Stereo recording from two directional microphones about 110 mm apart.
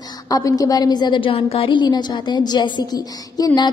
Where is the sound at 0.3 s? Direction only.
35° left (ahead or behind).